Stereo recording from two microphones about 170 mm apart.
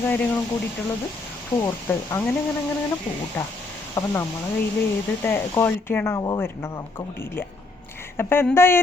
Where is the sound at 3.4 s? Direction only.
15° left (ahead or behind).